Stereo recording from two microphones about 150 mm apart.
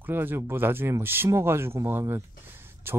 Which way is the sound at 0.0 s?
15° right (ahead or behind).